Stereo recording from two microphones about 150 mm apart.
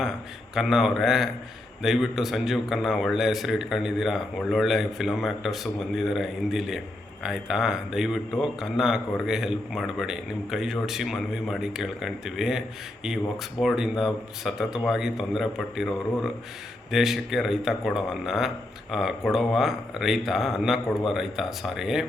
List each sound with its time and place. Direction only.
0.5 s a man's voice: centre (ahead or behind)